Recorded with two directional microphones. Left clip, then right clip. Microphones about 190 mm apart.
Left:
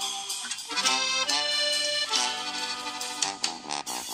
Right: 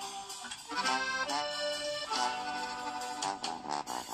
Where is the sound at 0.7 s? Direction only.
30° left (ahead or behind).